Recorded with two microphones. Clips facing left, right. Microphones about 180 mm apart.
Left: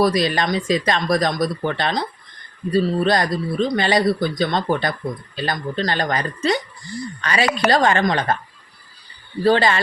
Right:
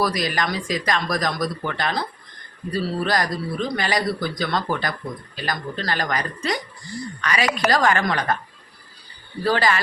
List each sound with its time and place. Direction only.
0.0 s a woman's voice: 25° left (ahead or behind)
9.4 s speech: 25° left (ahead or behind)